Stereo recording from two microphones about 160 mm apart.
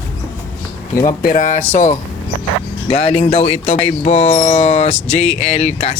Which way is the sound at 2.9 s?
40° left (ahead or behind).